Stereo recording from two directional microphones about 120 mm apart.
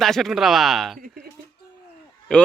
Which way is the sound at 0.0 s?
Centre (ahead or behind).